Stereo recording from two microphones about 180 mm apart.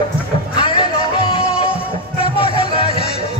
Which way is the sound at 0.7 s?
30° left (ahead or behind).